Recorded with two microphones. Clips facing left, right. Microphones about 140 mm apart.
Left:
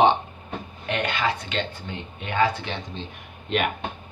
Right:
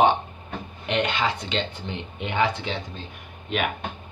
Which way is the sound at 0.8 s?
20° right (ahead or behind).